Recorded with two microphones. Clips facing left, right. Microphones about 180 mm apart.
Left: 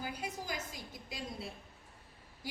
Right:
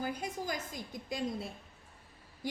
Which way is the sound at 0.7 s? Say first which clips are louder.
Right 7 dB; 45° right (ahead or behind).